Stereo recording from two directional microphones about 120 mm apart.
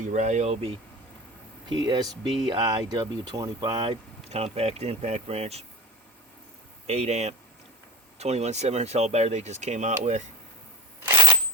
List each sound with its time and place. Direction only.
0.0 s speech: 90° right; by 0.8 s 55° right (ahead or behind)
1.7 s speech: 35° right (ahead or behind)
4.3 s speech: 60° right (ahead or behind)
6.8 s speech: 60° right (ahead or behind); by 10.2 s 80° right